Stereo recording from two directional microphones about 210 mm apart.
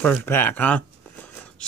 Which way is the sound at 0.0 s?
10° left (ahead or behind).